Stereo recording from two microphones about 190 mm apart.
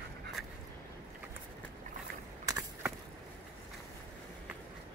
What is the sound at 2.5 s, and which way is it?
Skateboard, 15° right (ahead or behind).